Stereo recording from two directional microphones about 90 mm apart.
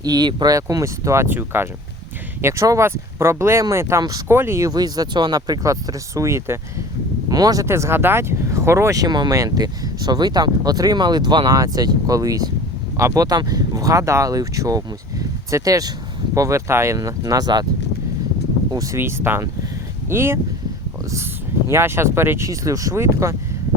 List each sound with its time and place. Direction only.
0.0 s speech: 50° right (ahead or behind)
0.5 s speech: 40° right (ahead or behind)
4.7 s speech: 45° right (ahead or behind)
7.3 s speech: 45° right (ahead or behind)
7.7 s speech: 30° right (ahead or behind)
9.0 s speech: 55° right (ahead or behind)
18.7 s speech: 40° right (ahead or behind)
18.9 s speech: 25° right (ahead or behind)
21.7 s speech: 30° right (ahead or behind)
22.4 s speech: 40° right (ahead or behind)